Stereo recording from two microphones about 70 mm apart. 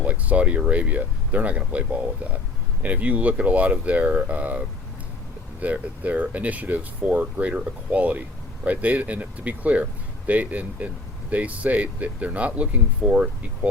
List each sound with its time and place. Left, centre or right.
0.0 s speech: right